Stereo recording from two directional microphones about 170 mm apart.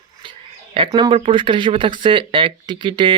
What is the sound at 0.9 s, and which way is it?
Speech, 25° right (ahead or behind).